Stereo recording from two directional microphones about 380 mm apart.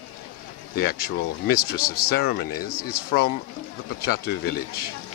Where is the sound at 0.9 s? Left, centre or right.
Left.